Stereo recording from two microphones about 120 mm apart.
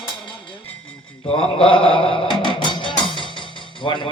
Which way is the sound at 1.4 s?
45° left (ahead or behind).